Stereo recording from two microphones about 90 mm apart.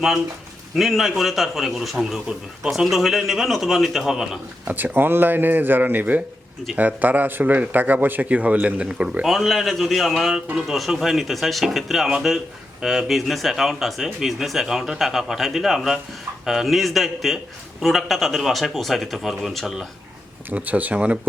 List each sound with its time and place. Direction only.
0.8 s a man's voice: centre (ahead or behind)
4.6 s speech: 20° right (ahead or behind)
9.2 s a man's voice: centre (ahead or behind)
20.5 s speech: 15° right (ahead or behind)